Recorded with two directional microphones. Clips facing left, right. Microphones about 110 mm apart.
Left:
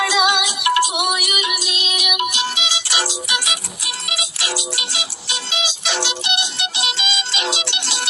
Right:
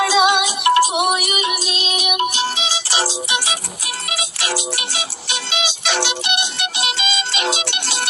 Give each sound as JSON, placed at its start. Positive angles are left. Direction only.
{"t": 0.0, "sound": "music", "side_deg": -30}
{"t": 4.0, "sound": "music", "side_deg": -50}